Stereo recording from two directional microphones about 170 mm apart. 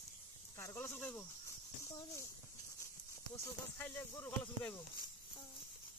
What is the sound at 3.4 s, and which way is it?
Speech, 10° left (ahead or behind).